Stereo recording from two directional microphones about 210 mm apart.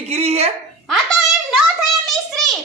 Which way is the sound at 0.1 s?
30° right (ahead or behind).